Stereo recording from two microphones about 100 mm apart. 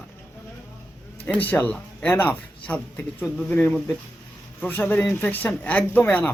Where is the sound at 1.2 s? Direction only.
15° left (ahead or behind).